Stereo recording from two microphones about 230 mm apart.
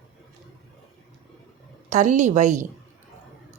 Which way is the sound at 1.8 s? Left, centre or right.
Right.